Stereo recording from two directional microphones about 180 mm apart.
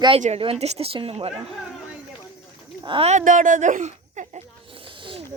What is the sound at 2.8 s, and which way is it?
Speech, 30° right (ahead or behind).